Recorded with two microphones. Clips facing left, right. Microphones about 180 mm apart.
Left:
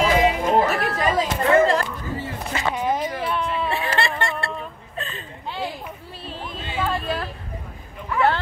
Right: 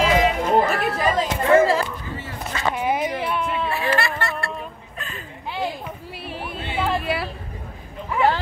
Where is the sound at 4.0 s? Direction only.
20° left (ahead or behind).